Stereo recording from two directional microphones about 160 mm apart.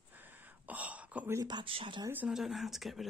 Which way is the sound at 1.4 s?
30° right (ahead or behind).